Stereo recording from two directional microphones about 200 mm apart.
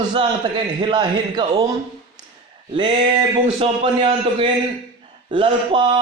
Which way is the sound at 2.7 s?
20° right (ahead or behind).